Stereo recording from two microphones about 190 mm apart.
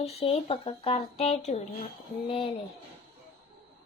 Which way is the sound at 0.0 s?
35° left (ahead or behind).